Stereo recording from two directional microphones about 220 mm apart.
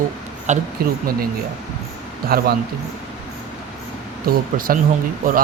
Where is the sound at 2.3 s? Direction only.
45° right (ahead or behind).